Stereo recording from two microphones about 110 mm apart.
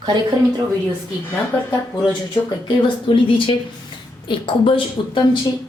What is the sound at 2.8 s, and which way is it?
Speech, 50° left (ahead or behind).